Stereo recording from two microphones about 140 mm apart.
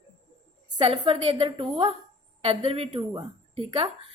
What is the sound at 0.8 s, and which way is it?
Speech, 40° right (ahead or behind).